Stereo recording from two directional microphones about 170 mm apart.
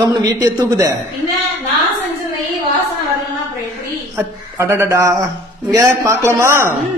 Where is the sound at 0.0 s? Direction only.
25° right (ahead or behind).